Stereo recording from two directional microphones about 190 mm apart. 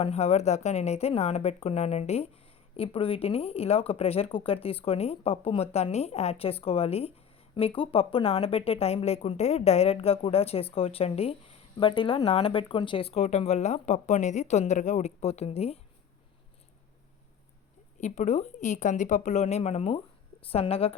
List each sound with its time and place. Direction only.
0.0 s a woman's voice: 35° left (ahead or behind)
18.0 s a woman's voice: 40° left (ahead or behind)